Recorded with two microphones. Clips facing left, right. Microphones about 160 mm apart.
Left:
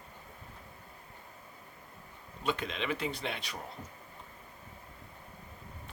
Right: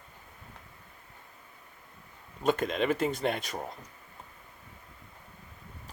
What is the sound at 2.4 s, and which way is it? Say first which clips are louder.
Speech: right 7 dB; 45° right (ahead or behind).